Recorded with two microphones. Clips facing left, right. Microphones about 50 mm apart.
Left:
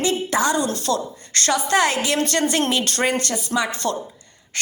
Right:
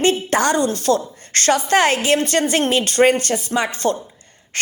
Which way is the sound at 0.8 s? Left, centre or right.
Right.